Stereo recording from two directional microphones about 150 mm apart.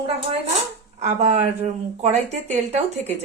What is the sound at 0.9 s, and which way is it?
Speech, 50° right (ahead or behind).